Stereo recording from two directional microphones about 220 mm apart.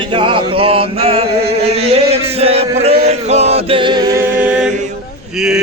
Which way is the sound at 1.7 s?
30° right (ahead or behind).